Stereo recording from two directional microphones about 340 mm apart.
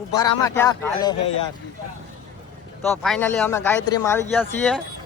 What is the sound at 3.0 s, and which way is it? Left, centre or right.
Speech, centre.